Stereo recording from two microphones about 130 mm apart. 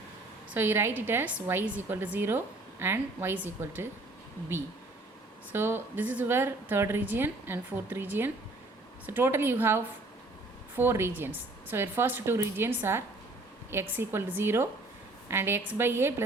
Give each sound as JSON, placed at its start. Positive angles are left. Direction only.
{"t": 0.5, "sound": "a woman's voice", "side_deg": -15}
{"t": 5.5, "sound": "a woman's voice", "side_deg": -15}